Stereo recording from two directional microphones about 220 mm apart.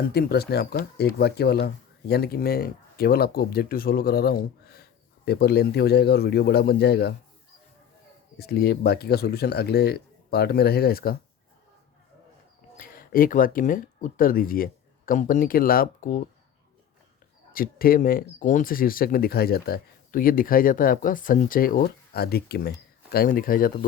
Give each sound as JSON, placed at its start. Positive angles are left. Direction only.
{"t": 0.1, "sound": "speech", "side_deg": 45}
{"t": 8.4, "sound": "speech", "side_deg": 45}
{"t": 12.7, "sound": "speech", "side_deg": 40}
{"t": 17.5, "sound": "speech", "side_deg": 40}